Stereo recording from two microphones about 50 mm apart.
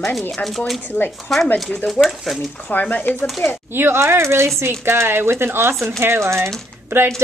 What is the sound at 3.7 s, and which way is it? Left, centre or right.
Speech, right.